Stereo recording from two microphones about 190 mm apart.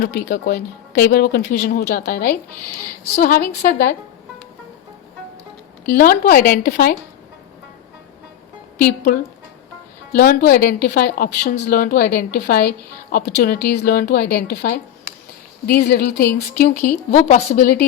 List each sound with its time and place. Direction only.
0.0 s a woman's voice: 60° left (ahead or behind)
6.0 s a woman's voice: 50° left (ahead or behind)
10.2 s a woman's voice: 50° left (ahead or behind)
16.8 s a woman's voice: 40° left (ahead or behind)